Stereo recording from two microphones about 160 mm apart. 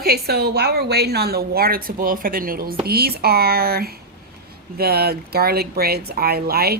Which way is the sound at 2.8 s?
75° right (ahead or behind).